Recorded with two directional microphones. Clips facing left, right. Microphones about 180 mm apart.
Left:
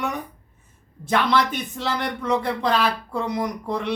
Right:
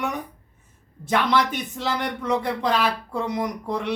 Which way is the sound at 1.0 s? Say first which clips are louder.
Left 1 dB; 10° right (ahead or behind).